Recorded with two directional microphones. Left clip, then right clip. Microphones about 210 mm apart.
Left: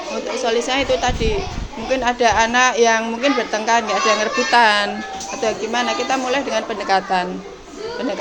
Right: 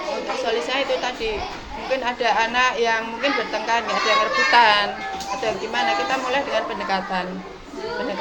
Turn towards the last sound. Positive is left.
turn(degrees=50)  # may be behind; listen again after turning